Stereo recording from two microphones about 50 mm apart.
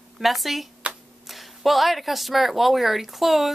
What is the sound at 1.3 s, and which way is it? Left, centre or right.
Speech, centre.